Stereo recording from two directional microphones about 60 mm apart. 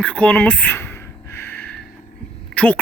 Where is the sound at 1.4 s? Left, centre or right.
Left.